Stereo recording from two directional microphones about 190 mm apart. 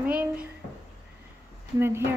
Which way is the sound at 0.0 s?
10° right (ahead or behind).